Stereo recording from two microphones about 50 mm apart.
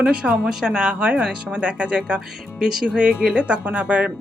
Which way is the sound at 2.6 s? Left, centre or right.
Centre.